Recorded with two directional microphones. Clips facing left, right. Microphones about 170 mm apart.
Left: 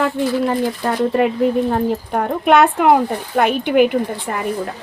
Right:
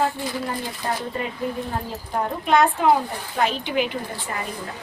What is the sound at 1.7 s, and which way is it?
Speech, 60° left (ahead or behind).